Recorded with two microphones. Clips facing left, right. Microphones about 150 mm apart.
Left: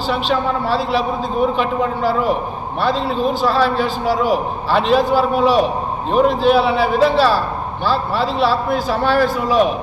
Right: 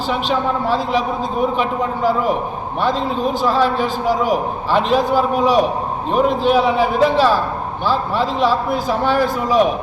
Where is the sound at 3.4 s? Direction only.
15° right (ahead or behind).